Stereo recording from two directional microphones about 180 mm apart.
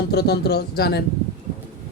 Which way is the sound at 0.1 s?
65° left (ahead or behind).